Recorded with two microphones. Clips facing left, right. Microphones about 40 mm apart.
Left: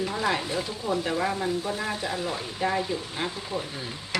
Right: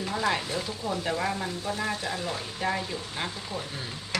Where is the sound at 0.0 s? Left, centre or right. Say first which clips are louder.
Left 1 dB; centre.